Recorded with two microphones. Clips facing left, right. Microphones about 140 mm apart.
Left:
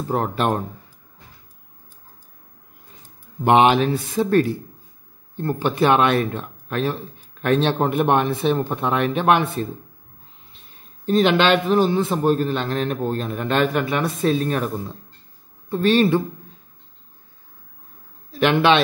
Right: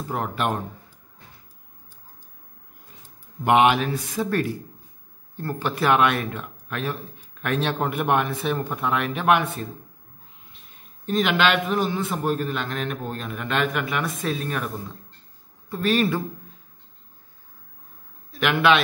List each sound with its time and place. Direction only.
0.1 s a man's voice: 35° left (ahead or behind)
3.4 s speech: 30° left (ahead or behind)
11.1 s a man's voice: 30° left (ahead or behind)
18.4 s speech: 30° left (ahead or behind)